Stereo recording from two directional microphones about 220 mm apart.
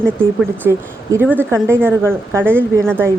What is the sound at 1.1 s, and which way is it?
A woman's voice, 10° right (ahead or behind).